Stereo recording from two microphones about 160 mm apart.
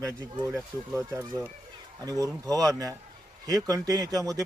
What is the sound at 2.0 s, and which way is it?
A man's voice, 20° right (ahead or behind).